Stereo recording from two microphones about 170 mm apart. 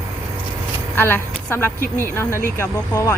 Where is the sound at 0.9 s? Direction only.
10° left (ahead or behind).